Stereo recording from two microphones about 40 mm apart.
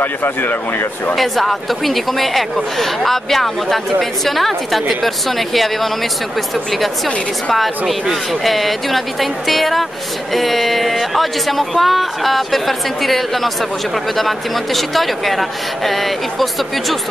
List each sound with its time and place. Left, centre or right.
0.0 s speech: left
1.1 s speech: centre
7.5 s speech: centre